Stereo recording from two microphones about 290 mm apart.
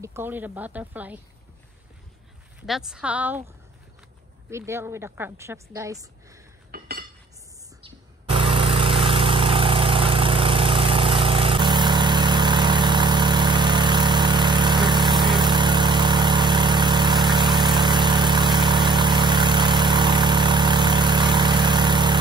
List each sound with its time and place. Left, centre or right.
0.0 s speech: centre
2.6 s speech: centre
4.5 s a woman's voice: centre
6.7 s cutlery: right
7.8 s vehicle: centre